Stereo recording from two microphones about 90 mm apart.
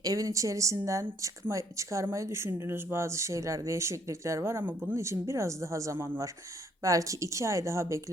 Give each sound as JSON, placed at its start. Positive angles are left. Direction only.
{"t": 0.0, "sound": "speech", "side_deg": -40}